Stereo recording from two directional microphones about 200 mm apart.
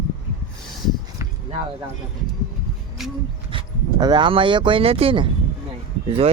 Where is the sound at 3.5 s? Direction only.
25° right (ahead or behind).